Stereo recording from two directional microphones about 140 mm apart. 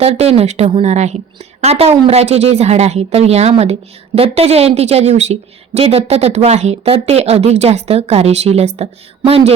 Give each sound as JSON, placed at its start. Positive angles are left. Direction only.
{"t": 0.0, "sound": "a woman's voice", "side_deg": -45}